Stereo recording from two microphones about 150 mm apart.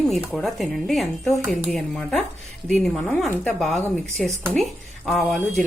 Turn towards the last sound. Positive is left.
turn(degrees=0)  # may be behind; listen again after turning